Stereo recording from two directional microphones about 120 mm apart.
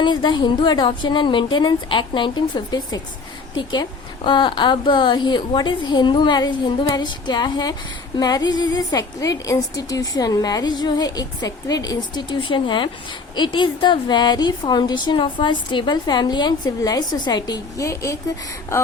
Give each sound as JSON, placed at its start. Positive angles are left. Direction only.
{"t": 0.0, "sound": "a woman's voice", "side_deg": 40}